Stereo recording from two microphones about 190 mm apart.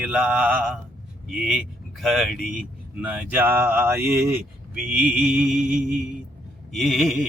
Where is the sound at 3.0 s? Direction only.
10° right (ahead or behind).